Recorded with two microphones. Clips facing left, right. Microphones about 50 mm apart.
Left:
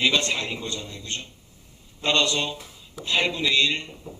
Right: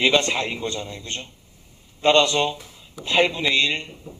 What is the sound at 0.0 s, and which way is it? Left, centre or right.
Speech, right.